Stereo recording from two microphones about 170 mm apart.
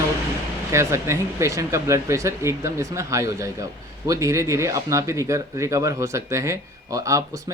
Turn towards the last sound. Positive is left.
turn(degrees=-20)  # may be behind; listen again after turning